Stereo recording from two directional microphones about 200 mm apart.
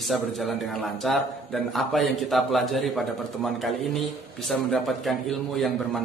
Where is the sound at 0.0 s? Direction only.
Centre (ahead or behind).